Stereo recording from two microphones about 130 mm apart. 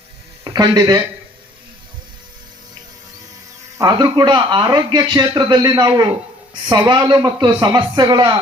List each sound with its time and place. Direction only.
0.4 s speech: 30° right (ahead or behind)
3.8 s speech: 30° right (ahead or behind)